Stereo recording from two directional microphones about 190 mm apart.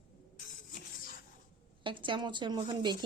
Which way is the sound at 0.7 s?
45° left (ahead or behind).